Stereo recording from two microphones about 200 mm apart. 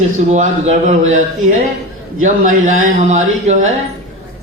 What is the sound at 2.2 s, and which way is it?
A man's voice, 40° right (ahead or behind).